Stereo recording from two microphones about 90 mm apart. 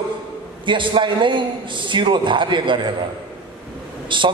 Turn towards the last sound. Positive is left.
turn(degrees=-60)  # may be behind; listen again after turning